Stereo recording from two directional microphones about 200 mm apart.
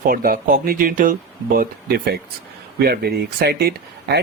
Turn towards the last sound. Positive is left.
turn(degrees=-50)  # may be behind; listen again after turning